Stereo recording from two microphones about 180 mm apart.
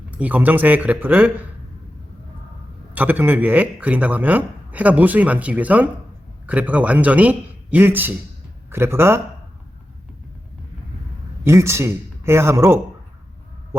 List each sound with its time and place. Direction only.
0.1 s speech: 10° right (ahead or behind)
2.9 s a man's voice: 10° right (ahead or behind)
11.4 s speech: 15° right (ahead or behind)